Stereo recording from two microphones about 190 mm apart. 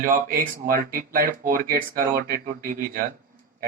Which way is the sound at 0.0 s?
50° right (ahead or behind).